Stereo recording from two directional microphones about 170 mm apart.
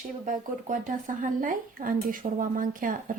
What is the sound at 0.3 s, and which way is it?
Speech, 50° right (ahead or behind).